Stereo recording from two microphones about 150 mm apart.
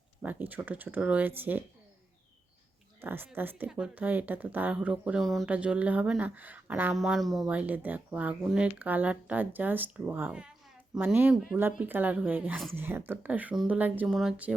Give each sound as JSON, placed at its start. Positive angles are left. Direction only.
{"t": 0.2, "sound": "speech", "side_deg": -10}
{"t": 3.0, "sound": "speech", "side_deg": -15}